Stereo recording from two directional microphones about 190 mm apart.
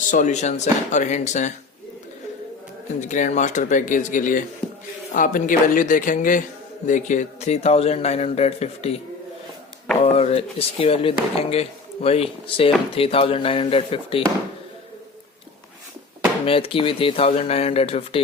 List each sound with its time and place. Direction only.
0.1 s speech: 40° left (ahead or behind)
3.0 s speech: 40° left (ahead or behind)
10.0 s speech: 30° left (ahead or behind)
16.5 s speech: 30° left (ahead or behind)